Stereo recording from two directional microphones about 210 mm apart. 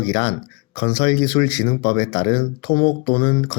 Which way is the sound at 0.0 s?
50° left (ahead or behind).